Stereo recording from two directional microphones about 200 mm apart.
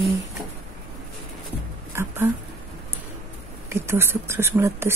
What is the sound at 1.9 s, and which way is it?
Speech, 10° right (ahead or behind).